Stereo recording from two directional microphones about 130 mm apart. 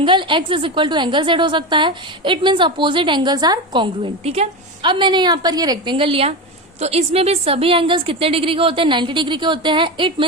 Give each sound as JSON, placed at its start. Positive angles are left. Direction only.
{"t": 0.0, "sound": "a woman's voice", "side_deg": -40}
{"t": 4.8, "sound": "a woman's voice", "side_deg": -35}